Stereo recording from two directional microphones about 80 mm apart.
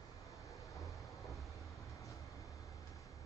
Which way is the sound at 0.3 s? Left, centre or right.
Left.